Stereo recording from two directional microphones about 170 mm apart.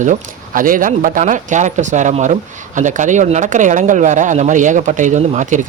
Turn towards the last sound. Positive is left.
turn(degrees=-45)  # may be behind; listen again after turning